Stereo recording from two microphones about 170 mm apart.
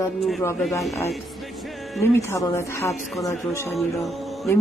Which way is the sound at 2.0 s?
15° left (ahead or behind).